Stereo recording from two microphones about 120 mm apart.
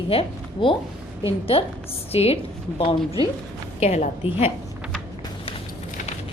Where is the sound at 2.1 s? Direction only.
55° left (ahead or behind).